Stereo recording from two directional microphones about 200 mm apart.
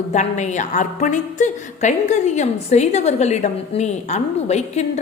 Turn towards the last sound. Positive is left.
turn(degrees=35)  # may be behind; listen again after turning